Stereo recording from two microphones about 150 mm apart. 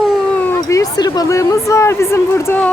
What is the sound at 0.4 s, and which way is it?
Speech, 20° left (ahead or behind).